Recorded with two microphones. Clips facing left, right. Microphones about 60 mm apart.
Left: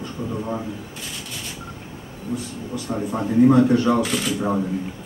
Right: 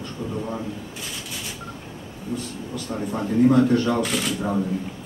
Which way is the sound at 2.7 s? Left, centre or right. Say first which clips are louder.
Left 3 dB; centre.